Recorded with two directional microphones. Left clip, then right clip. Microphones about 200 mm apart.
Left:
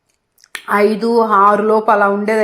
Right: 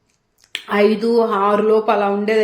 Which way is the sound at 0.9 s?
15° left (ahead or behind).